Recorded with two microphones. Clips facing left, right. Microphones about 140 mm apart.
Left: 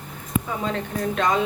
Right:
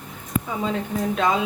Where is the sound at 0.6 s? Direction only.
5° right (ahead or behind).